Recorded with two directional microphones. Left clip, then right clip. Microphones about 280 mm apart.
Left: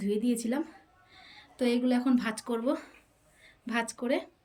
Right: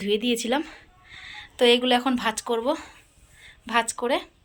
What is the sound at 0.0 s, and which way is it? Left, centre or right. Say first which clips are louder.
Speech: right 7 dB; centre.